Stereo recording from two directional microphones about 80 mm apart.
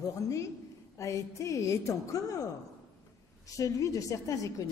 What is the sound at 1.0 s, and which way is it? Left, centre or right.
A woman's voice, left.